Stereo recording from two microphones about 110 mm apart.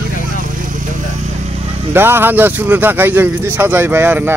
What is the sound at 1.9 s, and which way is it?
Speech, 20° right (ahead or behind).